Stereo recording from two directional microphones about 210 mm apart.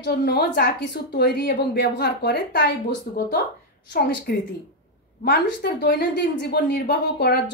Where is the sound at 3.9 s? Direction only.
50° left (ahead or behind).